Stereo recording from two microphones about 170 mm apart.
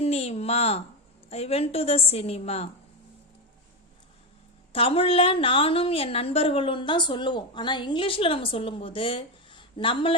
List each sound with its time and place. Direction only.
0.0 s a sound: 35° left (ahead or behind)
1.3 s a woman's voice: 35° left (ahead or behind)
4.7 s a woman's voice: 35° left (ahead or behind)